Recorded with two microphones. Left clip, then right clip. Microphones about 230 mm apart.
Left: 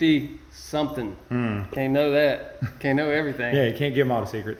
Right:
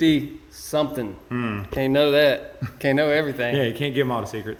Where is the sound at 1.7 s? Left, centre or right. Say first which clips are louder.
Right 4 dB; right.